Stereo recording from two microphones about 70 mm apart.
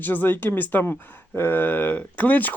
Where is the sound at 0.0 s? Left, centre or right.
Left.